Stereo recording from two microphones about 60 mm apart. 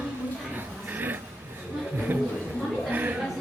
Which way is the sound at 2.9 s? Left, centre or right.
Right.